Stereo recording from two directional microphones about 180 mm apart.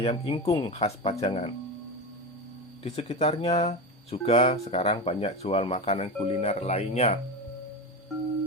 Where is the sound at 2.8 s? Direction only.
35° left (ahead or behind).